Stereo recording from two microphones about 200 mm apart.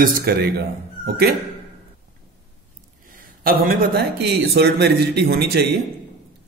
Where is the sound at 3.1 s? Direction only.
45° right (ahead or behind).